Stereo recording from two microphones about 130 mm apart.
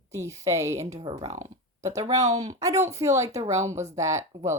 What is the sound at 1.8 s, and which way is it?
Speech, 25° right (ahead or behind).